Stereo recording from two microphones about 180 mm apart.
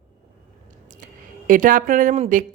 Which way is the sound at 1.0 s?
45° right (ahead or behind).